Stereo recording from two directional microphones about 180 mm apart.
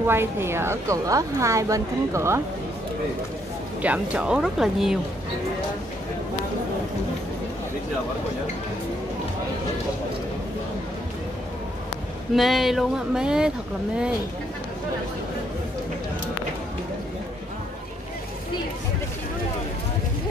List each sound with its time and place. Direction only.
0.0 s speech: 15° right (ahead or behind)
3.8 s speech: 5° right (ahead or behind)
12.4 s speech: centre (ahead or behind)